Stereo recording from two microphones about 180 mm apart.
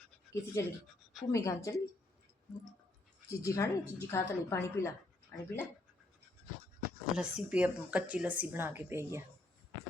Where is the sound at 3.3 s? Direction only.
15° left (ahead or behind).